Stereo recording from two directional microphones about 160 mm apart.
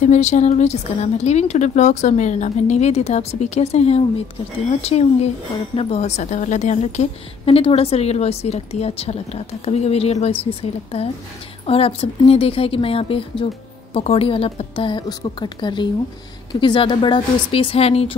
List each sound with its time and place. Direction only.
0.0 s a woman's voice: 45° left (ahead or behind)